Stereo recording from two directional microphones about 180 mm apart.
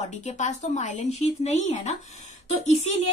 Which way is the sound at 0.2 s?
40° left (ahead or behind).